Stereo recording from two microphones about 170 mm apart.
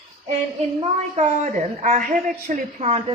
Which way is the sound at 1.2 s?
45° right (ahead or behind).